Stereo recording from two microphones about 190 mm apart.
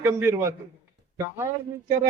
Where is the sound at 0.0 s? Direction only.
10° right (ahead or behind).